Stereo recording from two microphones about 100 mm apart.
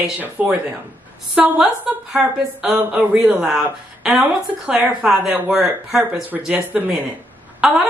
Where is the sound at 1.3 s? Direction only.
15° right (ahead or behind).